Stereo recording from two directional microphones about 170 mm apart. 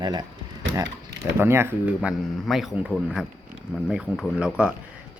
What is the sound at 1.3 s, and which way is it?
Speech, 15° right (ahead or behind).